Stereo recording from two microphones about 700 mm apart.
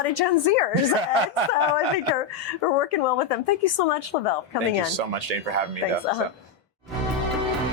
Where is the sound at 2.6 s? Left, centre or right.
Left.